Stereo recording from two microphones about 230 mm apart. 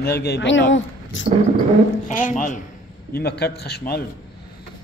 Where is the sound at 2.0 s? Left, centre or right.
Left.